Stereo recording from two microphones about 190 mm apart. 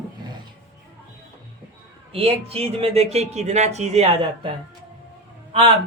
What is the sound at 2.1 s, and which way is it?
Speech, 30° right (ahead or behind).